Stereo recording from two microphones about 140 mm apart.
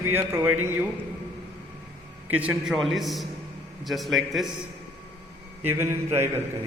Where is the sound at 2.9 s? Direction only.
Centre (ahead or behind).